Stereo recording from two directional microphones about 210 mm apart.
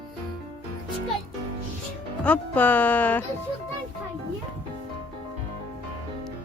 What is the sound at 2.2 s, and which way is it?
Speech, 5° left (ahead or behind).